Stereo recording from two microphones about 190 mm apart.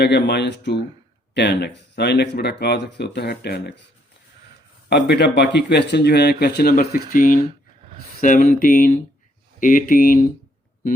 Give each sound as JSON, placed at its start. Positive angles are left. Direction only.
{"t": 0.0, "sound": "speech", "side_deg": 65}
{"t": 4.9, "sound": "speech", "side_deg": 65}